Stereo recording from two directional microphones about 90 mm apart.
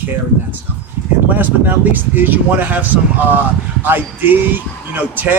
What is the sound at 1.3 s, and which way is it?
Speech, 20° right (ahead or behind).